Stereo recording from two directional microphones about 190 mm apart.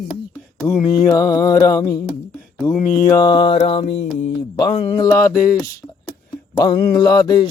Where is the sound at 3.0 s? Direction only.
20° left (ahead or behind).